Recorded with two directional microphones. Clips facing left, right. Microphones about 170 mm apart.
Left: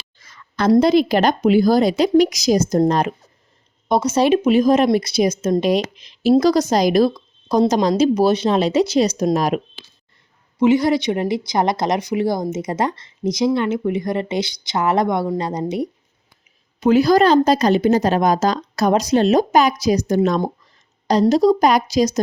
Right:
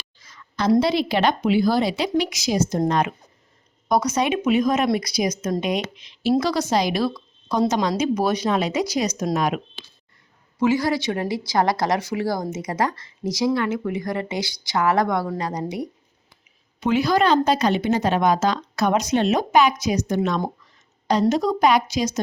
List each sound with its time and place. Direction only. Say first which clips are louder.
0.2 s a sound: left 4 dB; 55° left (ahead or behind)
0.7 s speech: left 5 dB; 45° left (ahead or behind)
10.6 s speech: left 5 dB; 20° left (ahead or behind)
16.8 s speech: left 6 dB; 40° left (ahead or behind)